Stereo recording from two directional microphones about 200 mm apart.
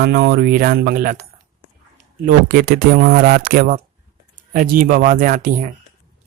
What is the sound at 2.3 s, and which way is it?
Speech, 45° right (ahead or behind).